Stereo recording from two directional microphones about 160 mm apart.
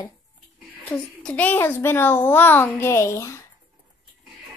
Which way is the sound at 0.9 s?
10° left (ahead or behind).